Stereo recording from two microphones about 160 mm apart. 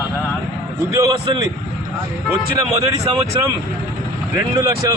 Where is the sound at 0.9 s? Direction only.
20° right (ahead or behind).